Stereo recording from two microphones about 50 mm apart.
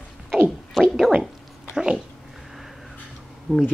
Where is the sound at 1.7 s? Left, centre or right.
Centre.